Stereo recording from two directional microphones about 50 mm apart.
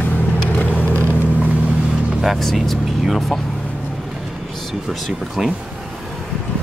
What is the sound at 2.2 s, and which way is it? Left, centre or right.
Speech, centre.